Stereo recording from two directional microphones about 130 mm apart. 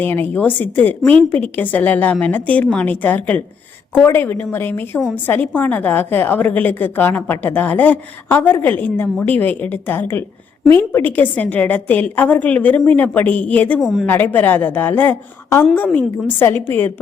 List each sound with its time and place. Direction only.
0.0 s a woman's voice: 15° left (ahead or behind)
13.7 s a woman's voice: 5° right (ahead or behind)
14.1 s a woman's voice: 15° left (ahead or behind)